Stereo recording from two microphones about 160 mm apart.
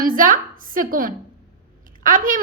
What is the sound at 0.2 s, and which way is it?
A woman's voice, 60° right (ahead or behind).